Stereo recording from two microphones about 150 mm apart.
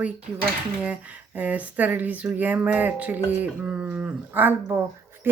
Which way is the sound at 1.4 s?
10° right (ahead or behind).